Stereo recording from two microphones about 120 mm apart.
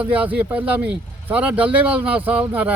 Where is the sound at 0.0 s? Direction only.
15° right (ahead or behind).